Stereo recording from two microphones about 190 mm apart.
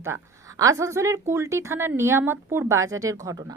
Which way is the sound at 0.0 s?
15° right (ahead or behind).